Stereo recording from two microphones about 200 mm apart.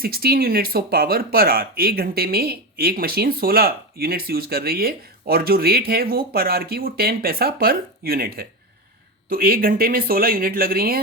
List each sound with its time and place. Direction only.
0.0 s speech: 50° right (ahead or behind)